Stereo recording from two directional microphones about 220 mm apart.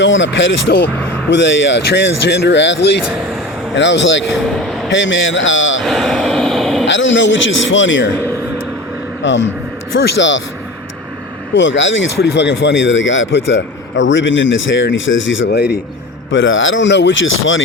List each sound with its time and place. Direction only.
0.0 s speech: 55° left (ahead or behind)
5.8 s a sound: centre (ahead or behind)
6.8 s speech: 55° left (ahead or behind)
9.2 s speech: 55° left (ahead or behind)
11.5 s speech: 55° left (ahead or behind)
16.3 s speech: 60° left (ahead or behind)